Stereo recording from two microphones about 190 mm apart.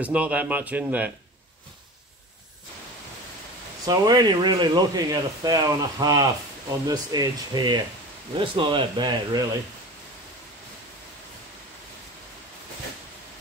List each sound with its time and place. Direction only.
0.0 s speech: 10° right (ahead or behind)
3.8 s speech: 20° right (ahead or behind)